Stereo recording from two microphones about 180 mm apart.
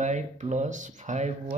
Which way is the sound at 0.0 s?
40° right (ahead or behind).